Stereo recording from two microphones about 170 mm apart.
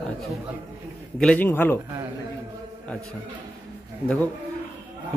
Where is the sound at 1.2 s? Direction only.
10° left (ahead or behind).